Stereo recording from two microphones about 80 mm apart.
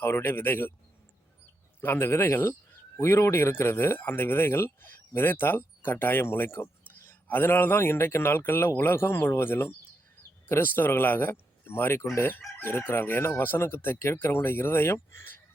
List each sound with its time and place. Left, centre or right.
0.0 s speech: left
1.8 s speech: left